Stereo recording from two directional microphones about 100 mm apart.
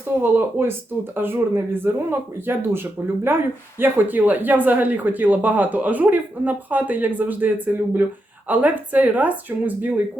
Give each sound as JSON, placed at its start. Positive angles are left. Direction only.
{"t": 0.2, "sound": "speech", "side_deg": -25}